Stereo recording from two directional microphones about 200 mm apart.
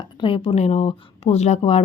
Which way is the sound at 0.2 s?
25° left (ahead or behind).